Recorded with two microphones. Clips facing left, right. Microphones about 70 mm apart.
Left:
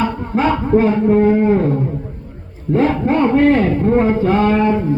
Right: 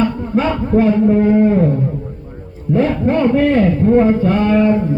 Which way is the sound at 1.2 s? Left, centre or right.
Centre.